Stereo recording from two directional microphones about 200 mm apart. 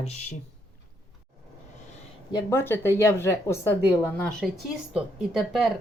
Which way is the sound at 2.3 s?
10° left (ahead or behind).